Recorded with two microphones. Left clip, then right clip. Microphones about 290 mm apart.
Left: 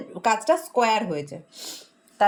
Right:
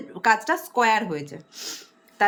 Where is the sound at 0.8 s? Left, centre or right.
Centre.